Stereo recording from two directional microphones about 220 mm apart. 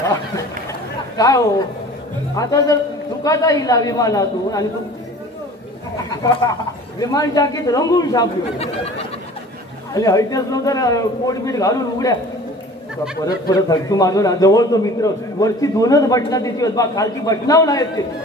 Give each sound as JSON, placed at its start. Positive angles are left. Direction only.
{"t": 1.1, "sound": "a man's voice", "side_deg": 15}
{"t": 7.0, "sound": "a man's voice", "side_deg": 15}
{"t": 8.5, "sound": "a sound", "side_deg": 30}
{"t": 9.9, "sound": "a man's voice", "side_deg": 15}
{"t": 13.5, "sound": "a man's voice", "side_deg": 15}